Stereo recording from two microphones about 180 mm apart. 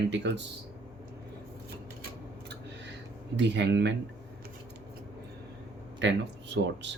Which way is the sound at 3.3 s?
80° right.